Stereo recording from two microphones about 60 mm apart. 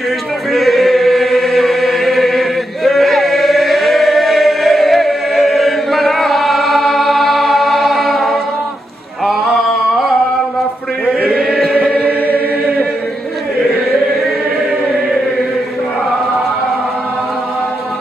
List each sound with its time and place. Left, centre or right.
0.5 s chant: centre
11.2 s chant: centre
11.7 s chant: centre
12.2 s choir: left